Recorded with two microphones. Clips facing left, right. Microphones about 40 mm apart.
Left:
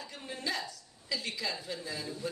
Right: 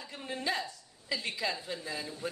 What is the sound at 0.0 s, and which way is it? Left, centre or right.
A woman's voice, centre.